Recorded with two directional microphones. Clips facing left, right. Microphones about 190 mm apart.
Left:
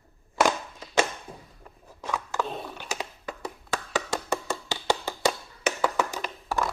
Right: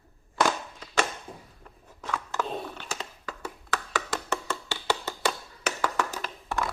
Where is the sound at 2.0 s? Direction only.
15° left (ahead or behind).